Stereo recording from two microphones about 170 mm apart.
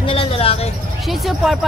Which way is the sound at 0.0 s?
35° left (ahead or behind).